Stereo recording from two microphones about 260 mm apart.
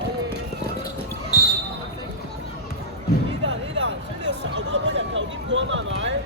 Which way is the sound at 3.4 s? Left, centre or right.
Right.